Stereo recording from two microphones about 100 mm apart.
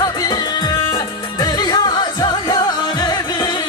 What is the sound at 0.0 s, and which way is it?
Music, 40° left (ahead or behind).